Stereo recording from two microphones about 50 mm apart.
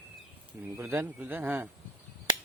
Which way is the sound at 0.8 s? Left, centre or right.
Right.